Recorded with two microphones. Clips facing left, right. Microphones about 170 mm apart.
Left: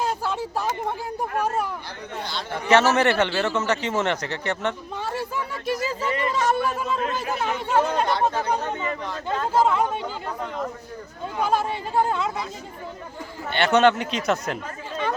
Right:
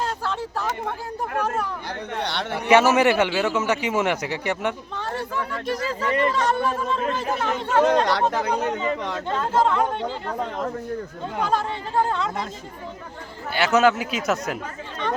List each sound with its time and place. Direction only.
0.0 s a sound: 10° left (ahead or behind)
1.4 s a man's voice: 10° left (ahead or behind)
2.1 s speech: 65° right (ahead or behind)
2.5 s a man's voice: 10° right (ahead or behind)
5.6 s a man's voice: 5° left (ahead or behind)
7.9 s speech: 90° right
9.5 s a man's voice: 5° left (ahead or behind)
11.4 s a man's voice: 10° left (ahead or behind)
13.5 s speech: 5° right (ahead or behind)